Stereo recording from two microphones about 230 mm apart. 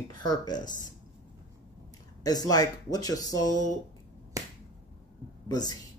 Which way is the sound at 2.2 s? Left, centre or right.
Centre.